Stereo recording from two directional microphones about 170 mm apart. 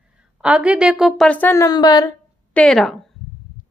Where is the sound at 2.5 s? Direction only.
5° left (ahead or behind).